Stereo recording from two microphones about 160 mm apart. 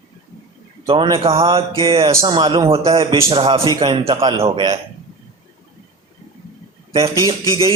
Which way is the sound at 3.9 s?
35° right (ahead or behind).